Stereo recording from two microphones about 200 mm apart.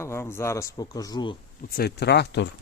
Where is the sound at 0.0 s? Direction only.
15° left (ahead or behind).